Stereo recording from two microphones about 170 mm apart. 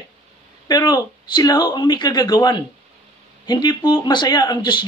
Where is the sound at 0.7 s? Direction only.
25° left (ahead or behind).